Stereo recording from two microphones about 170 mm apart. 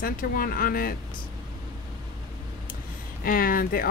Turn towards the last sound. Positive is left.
turn(degrees=60)  # may be behind; listen again after turning